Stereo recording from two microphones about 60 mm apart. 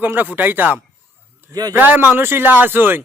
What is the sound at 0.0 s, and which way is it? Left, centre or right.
Speech, right.